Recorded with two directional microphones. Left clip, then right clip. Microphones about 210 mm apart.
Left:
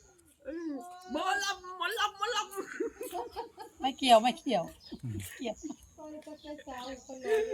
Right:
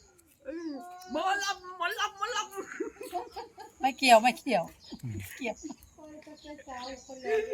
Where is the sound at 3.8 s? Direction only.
45° right (ahead or behind).